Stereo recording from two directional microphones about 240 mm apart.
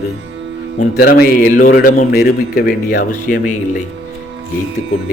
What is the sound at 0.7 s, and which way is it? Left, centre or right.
Speech, left.